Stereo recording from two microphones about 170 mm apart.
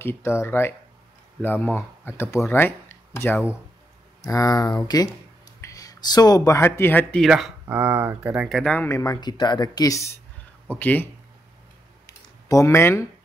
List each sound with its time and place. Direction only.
0.0 s speech: 15° left (ahead or behind)
7.2 s speech: centre (ahead or behind)
8.7 s speech: 15° left (ahead or behind)
12.4 s speech: 20° left (ahead or behind)